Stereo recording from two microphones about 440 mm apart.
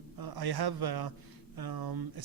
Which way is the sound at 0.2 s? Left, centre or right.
Right.